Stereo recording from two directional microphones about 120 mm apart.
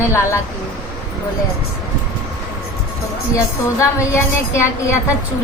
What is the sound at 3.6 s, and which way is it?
A woman's voice, 25° left (ahead or behind).